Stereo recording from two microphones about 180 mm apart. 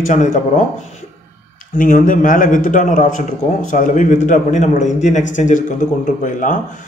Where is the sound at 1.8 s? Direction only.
45° left (ahead or behind).